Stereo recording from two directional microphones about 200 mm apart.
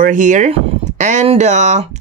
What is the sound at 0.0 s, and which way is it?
Speech, 40° right (ahead or behind).